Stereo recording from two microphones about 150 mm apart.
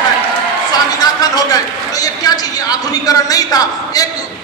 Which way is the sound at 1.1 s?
25° left (ahead or behind).